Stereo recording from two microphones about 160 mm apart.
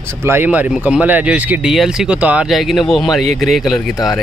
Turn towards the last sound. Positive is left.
turn(degrees=0)  # may be behind; listen again after turning